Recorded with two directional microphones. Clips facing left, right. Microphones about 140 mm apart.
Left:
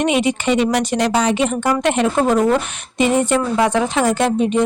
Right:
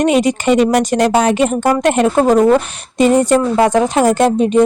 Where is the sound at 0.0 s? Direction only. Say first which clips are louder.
Right 4 dB; 40° right (ahead or behind).